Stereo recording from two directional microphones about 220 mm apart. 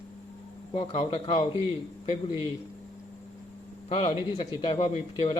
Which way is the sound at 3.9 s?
25° left (ahead or behind).